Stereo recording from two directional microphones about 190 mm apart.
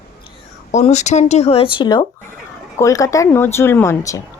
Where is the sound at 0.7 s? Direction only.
35° left (ahead or behind); by 4.2 s 15° left (ahead or behind).